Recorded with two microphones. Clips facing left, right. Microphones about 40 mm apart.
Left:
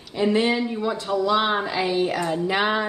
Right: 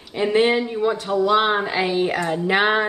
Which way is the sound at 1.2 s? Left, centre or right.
Right.